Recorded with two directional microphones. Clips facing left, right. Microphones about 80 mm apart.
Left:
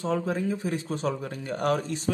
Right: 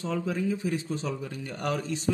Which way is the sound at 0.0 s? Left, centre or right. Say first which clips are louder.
Left 2 dB; left.